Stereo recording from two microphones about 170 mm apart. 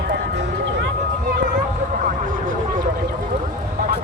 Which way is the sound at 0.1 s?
85° right.